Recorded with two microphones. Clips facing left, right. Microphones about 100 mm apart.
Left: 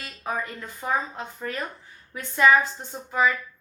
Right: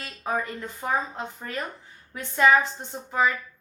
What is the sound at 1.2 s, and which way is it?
A woman's voice, 25° right (ahead or behind).